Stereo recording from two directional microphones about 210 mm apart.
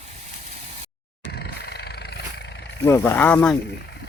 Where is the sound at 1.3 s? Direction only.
50° left (ahead or behind).